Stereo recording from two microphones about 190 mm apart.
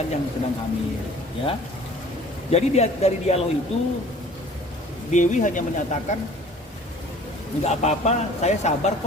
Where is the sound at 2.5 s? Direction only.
35° left (ahead or behind).